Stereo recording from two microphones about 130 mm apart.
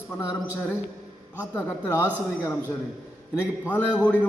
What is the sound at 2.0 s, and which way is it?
Speech, 15° right (ahead or behind).